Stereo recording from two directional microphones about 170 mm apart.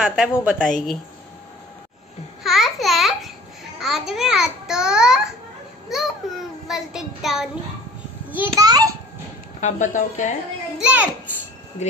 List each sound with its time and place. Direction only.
0.0 s a woman's voice: 5° right (ahead or behind)
2.4 s a child's voice: centre (ahead or behind)
8.5 s a child's voice: 20° right (ahead or behind)
9.6 s speech: 45° left (ahead or behind)
10.8 s a child's voice: 10° right (ahead or behind)